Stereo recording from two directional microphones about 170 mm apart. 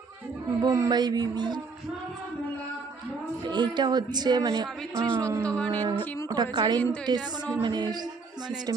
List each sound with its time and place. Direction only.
0.6 s speech: 20° right (ahead or behind)
3.4 s speech: 25° right (ahead or behind)
4.9 s speech: 5° left (ahead or behind)
6.2 s speech: 25° right (ahead or behind)
6.7 s speech: 10° left (ahead or behind)
7.6 s speech: 25° right (ahead or behind)